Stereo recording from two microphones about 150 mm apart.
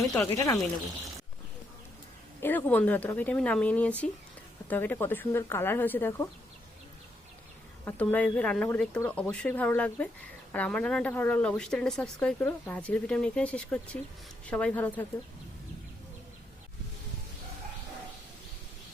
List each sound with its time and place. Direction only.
0.3 s speech: 20° left (ahead or behind)
2.4 s speech: 15° left (ahead or behind)
7.9 s speech: 10° left (ahead or behind)